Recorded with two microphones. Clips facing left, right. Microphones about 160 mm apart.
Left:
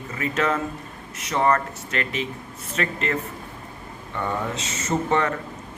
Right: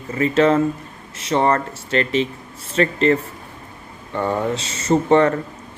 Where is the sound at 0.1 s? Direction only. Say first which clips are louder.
Right 9 dB; 30° right (ahead or behind).